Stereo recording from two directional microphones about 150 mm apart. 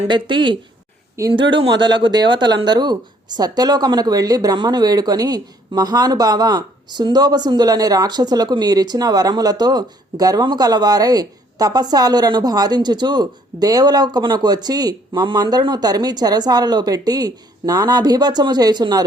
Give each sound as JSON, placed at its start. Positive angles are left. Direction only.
{"t": 0.1, "sound": "speech", "side_deg": -30}